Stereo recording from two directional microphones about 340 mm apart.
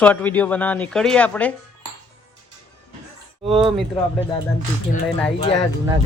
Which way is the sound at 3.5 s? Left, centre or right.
Centre.